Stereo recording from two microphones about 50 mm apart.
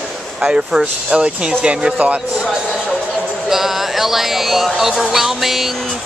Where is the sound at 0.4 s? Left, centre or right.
Centre.